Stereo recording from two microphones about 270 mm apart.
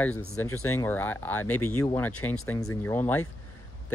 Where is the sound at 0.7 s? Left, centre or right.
Centre.